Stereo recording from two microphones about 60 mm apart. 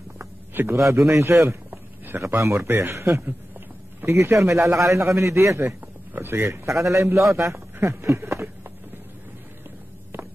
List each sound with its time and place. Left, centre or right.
0.7 s a man's voice: right
2.0 s a man's voice: right
2.4 s a man's voice: right
5.6 s a man's voice: right